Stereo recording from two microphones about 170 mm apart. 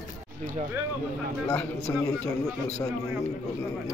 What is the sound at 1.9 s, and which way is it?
Speech, 15° left (ahead or behind).